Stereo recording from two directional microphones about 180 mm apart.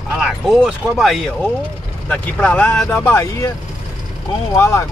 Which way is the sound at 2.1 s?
10° left (ahead or behind).